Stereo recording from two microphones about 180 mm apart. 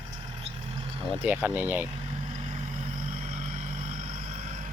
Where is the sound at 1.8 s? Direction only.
35° right (ahead or behind).